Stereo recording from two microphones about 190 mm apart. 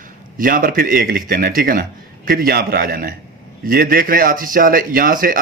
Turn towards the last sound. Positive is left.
turn(degrees=-50)  # may be behind; listen again after turning